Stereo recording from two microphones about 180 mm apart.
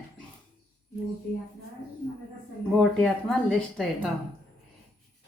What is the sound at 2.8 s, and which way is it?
Speech, 5° left (ahead or behind).